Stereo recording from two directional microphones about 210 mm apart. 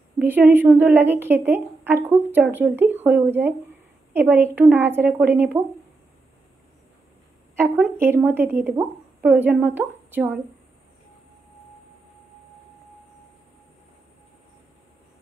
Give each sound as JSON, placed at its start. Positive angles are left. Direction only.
{"t": 0.2, "sound": "a woman's voice", "side_deg": -10}
{"t": 7.5, "sound": "a woman's voice", "side_deg": -10}